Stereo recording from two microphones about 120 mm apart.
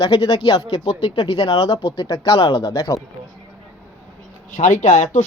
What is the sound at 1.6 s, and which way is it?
Speech, 55° left (ahead or behind).